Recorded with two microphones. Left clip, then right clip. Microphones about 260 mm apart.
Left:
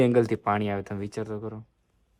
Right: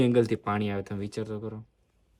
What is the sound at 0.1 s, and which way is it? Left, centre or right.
Speech, centre.